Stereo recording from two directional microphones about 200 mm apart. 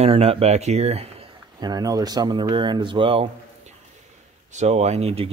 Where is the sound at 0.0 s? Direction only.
30° right (ahead or behind).